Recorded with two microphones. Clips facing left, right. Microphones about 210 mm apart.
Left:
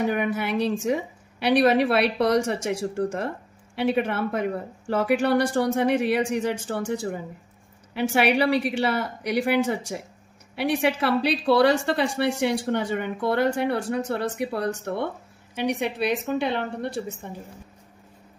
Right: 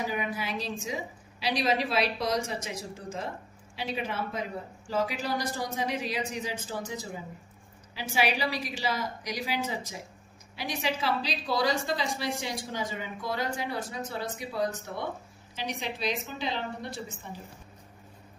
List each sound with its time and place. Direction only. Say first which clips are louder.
0.0 s a woman's voice: left 8 dB; 65° left (ahead or behind)